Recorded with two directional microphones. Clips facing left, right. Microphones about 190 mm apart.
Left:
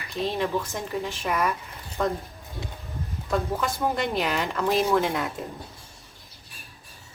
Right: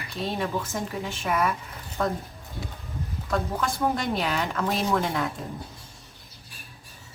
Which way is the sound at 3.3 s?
Centre (ahead or behind).